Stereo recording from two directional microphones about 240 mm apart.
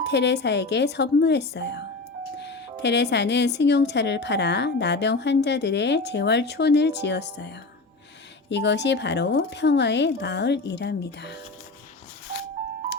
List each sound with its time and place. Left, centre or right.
0.0 s speech: left